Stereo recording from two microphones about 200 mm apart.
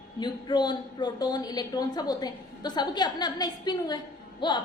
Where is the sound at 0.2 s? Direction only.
20° left (ahead or behind).